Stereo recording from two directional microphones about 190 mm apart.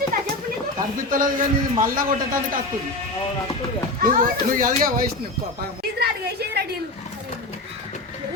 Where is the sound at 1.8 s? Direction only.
45° right (ahead or behind).